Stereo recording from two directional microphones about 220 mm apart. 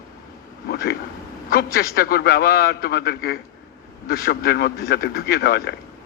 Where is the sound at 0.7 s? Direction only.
45° left (ahead or behind).